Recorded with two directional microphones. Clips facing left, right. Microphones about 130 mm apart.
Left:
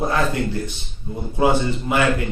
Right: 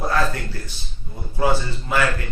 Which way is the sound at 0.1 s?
20° left (ahead or behind).